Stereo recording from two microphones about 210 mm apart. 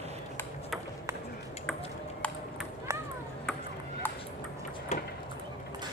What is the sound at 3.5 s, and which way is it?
Ping, 5° left (ahead or behind).